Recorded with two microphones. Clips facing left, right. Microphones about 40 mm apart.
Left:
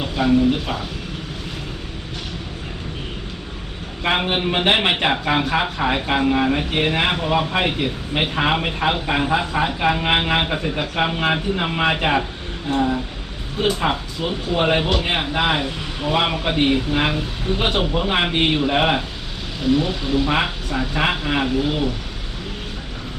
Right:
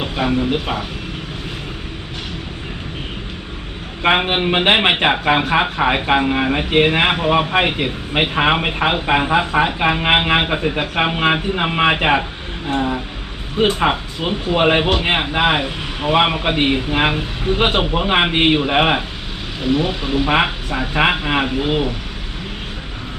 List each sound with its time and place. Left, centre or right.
0.0 s speech: right
4.0 s a man's voice: right